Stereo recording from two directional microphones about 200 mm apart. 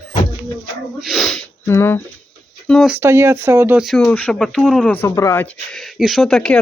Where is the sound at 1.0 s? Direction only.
Centre (ahead or behind).